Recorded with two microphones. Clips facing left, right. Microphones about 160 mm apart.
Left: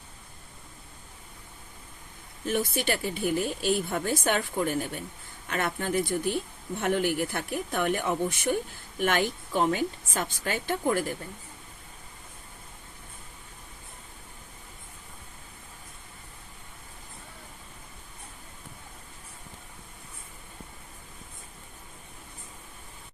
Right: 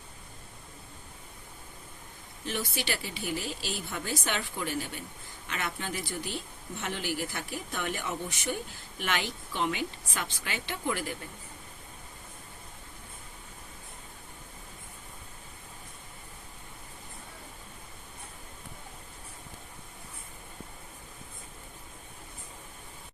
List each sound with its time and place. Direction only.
2.5 s speech: 50° left (ahead or behind)